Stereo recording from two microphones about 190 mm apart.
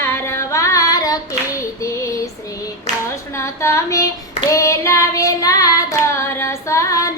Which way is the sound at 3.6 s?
15° left (ahead or behind).